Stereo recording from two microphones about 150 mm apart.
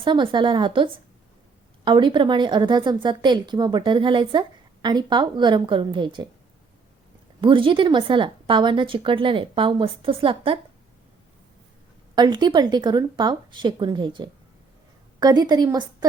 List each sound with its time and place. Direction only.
0.0 s a woman's voice: 35° right (ahead or behind)
7.4 s a woman's voice: 35° right (ahead or behind)
12.1 s a woman's voice: 30° right (ahead or behind)